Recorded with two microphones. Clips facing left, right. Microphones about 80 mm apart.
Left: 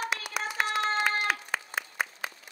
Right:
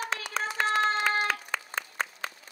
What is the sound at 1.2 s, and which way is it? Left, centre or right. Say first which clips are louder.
Applause: left 1 dB; centre.